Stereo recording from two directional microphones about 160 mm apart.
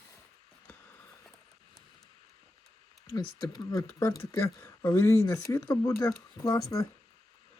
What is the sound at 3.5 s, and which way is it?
Speech, 20° left (ahead or behind).